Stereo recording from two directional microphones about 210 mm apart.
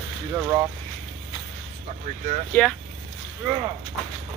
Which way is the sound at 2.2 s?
35° right (ahead or behind).